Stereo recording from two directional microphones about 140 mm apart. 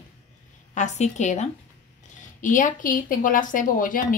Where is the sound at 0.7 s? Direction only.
55° left (ahead or behind).